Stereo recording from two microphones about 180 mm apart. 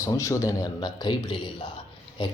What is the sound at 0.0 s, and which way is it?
A man's voice, 15° left (ahead or behind).